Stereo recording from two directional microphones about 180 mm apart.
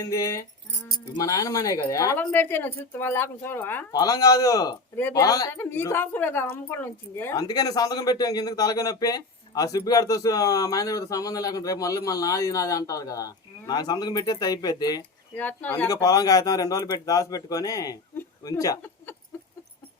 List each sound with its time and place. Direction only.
0.0 s a woman's voice: 20° left (ahead or behind)
15.4 s a woman's voice: 10° left (ahead or behind)
15.9 s a woman's voice: 20° left (ahead or behind)
19.3 s rodents: 15° left (ahead or behind)